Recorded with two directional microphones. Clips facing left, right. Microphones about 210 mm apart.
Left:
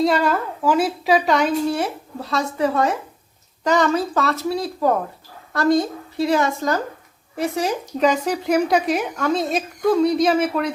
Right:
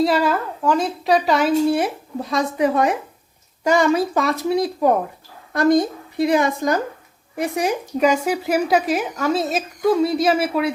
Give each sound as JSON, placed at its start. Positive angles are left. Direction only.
{"t": 0.0, "sound": "a woman's voice", "side_deg": 0}